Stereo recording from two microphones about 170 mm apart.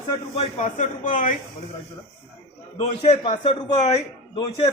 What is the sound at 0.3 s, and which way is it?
Speech, 45° left (ahead or behind).